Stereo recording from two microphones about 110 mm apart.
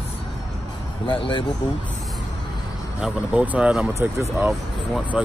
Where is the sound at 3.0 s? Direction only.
10° right (ahead or behind).